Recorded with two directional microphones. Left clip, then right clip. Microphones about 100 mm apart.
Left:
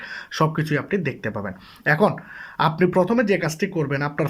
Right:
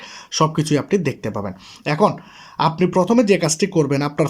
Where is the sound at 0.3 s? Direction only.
25° right (ahead or behind).